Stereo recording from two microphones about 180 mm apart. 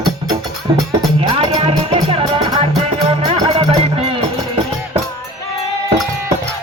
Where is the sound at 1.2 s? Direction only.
25° right (ahead or behind).